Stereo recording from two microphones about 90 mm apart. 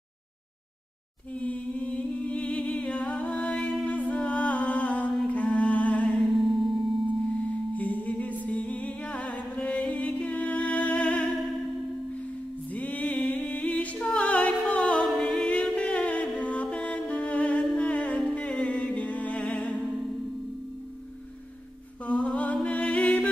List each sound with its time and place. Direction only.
1.3 s humming: 15° left (ahead or behind)
5.3 s music: 15° left (ahead or behind)
6.3 s music: centre (ahead or behind)
7.4 s singing bowl: 15° left (ahead or behind)
8.5 s music: 15° left (ahead or behind)
12.6 s music: 15° left (ahead or behind)
15.0 s a capella: 5° left (ahead or behind)
22.0 s a sound: 10° left (ahead or behind)